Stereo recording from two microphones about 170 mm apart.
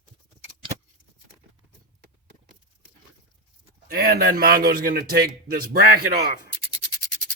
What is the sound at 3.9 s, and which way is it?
A man's voice, 65° right (ahead or behind).